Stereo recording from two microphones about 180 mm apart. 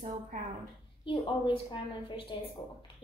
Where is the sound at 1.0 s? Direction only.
25° left (ahead or behind).